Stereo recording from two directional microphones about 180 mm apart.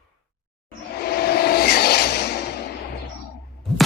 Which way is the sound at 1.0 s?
60° left (ahead or behind).